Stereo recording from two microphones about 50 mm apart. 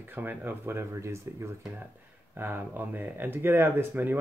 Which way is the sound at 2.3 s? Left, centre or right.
Right.